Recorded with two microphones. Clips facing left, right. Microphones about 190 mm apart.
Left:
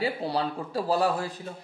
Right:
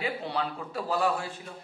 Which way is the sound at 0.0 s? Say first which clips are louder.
Left 4 dB; 35° left (ahead or behind).